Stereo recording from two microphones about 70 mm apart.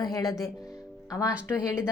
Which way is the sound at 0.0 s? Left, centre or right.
Left.